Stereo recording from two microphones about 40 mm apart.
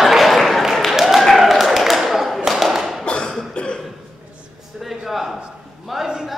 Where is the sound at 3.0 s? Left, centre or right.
Left.